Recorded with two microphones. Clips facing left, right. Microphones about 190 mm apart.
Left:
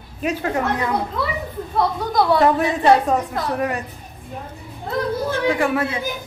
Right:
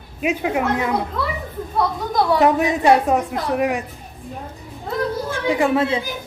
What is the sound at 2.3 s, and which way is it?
A woman's voice, 15° right (ahead or behind).